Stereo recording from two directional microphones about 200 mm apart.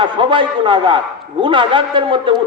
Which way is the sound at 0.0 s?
25° right (ahead or behind).